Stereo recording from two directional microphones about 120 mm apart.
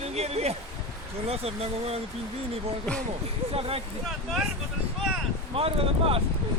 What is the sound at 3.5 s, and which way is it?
Speech, 50° right (ahead or behind).